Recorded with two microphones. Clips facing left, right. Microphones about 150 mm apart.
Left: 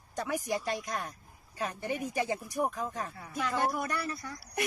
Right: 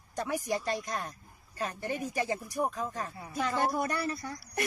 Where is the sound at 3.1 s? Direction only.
20° right (ahead or behind).